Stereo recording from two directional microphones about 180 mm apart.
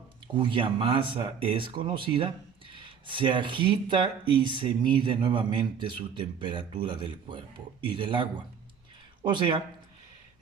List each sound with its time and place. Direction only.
0.3 s speech: 30° right (ahead or behind)